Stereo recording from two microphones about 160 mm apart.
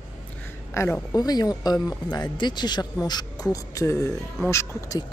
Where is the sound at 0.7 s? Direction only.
15° left (ahead or behind).